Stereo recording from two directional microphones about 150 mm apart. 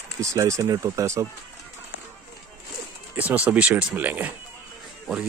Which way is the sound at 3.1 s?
10° right (ahead or behind).